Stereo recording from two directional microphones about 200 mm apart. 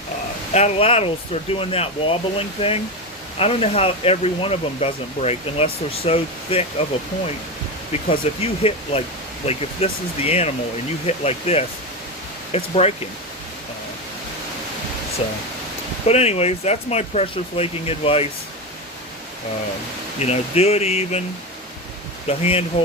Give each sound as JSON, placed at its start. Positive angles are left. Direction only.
{"t": 0.5, "sound": "speech", "side_deg": 30}
{"t": 8.4, "sound": "speech", "side_deg": 30}
{"t": 15.2, "sound": "speech", "side_deg": 30}
{"t": 20.1, "sound": "speech", "side_deg": 30}
{"t": 22.3, "sound": "speech", "side_deg": 30}